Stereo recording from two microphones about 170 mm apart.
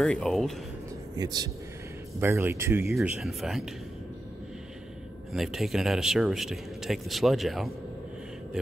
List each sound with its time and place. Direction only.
0.0 s speech: centre (ahead or behind)
1.1 s speech: 25° right (ahead or behind)
2.9 s speech: 5° right (ahead or behind)
5.3 s speech: centre (ahead or behind)